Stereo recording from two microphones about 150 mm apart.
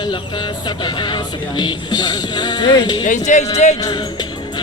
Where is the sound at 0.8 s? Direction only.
30° left (ahead or behind).